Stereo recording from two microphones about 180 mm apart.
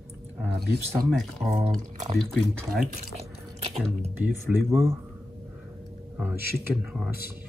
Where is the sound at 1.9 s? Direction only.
40° right (ahead or behind).